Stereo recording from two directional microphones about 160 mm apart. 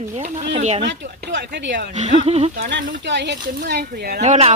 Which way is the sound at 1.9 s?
50° right (ahead or behind).